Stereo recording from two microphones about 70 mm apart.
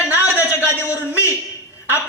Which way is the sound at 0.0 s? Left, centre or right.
Right.